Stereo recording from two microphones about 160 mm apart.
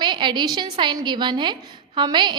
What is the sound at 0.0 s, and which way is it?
A woman's voice, 30° right (ahead or behind).